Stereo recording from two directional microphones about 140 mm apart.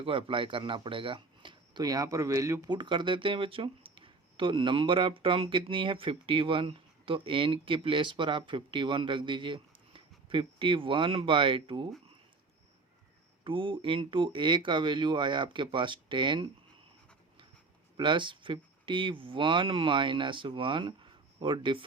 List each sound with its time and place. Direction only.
0.0 s speech: 40° right (ahead or behind); by 2.7 s 20° right (ahead or behind)
2.7 s speech: 35° right (ahead or behind)
13.4 s speech: 40° right (ahead or behind)
17.9 s speech: 35° right (ahead or behind)